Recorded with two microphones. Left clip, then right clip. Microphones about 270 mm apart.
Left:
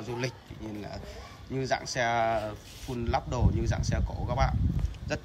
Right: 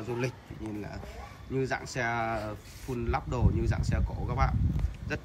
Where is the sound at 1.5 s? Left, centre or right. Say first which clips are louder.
Left 2 dB; centre.